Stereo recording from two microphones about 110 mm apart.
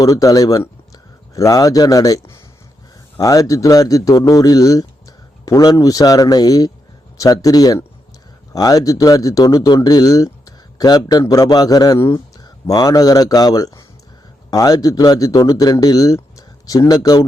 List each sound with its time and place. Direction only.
0.0 s speech: 30° left (ahead or behind)